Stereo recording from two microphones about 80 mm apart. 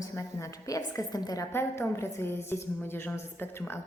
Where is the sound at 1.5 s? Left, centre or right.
Left.